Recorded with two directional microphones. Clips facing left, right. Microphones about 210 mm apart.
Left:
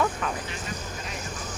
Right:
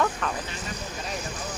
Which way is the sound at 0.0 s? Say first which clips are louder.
Even; 5° left (ahead or behind).